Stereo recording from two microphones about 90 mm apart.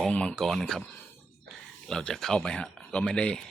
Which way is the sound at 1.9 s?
5° left (ahead or behind).